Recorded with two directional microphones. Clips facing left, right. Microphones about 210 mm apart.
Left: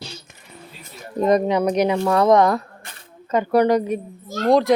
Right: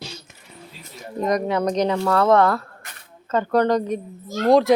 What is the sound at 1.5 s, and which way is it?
A woman's voice, 10° left (ahead or behind).